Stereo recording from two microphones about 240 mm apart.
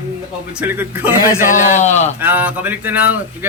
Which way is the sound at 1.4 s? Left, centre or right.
Left.